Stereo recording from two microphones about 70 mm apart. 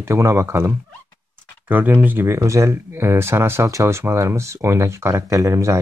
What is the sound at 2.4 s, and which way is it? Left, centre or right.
Speech, right.